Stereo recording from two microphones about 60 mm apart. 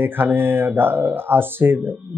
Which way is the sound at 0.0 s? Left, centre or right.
Right.